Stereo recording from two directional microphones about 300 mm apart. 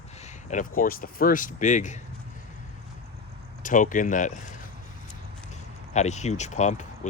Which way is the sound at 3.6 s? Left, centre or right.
Left.